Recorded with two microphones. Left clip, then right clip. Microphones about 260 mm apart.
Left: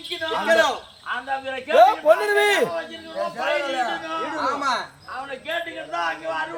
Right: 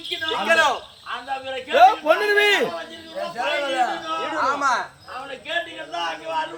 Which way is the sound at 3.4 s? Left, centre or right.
Centre.